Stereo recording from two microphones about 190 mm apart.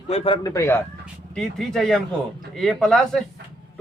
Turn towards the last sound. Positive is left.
turn(degrees=5)  # may be behind; listen again after turning